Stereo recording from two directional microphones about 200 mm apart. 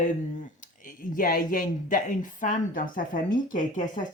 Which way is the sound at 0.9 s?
40° left (ahead or behind).